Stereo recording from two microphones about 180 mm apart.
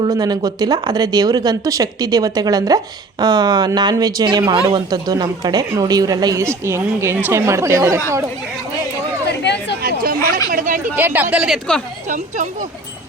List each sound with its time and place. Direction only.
0.0 s speech: 20° right (ahead or behind)
9.2 s chatter: 70° left (ahead or behind)
9.8 s chatter: 55° right (ahead or behind)
10.5 s a sound: 50° right (ahead or behind)
10.9 s speech: 10° right (ahead or behind)
12.0 s speech: 45° right (ahead or behind)